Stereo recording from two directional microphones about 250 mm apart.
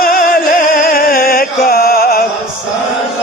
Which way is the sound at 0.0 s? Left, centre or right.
Left.